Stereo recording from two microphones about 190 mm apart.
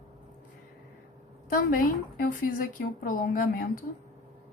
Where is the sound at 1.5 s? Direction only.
50° left (ahead or behind).